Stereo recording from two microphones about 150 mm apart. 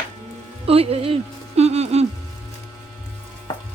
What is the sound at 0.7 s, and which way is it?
Speech, 40° right (ahead or behind).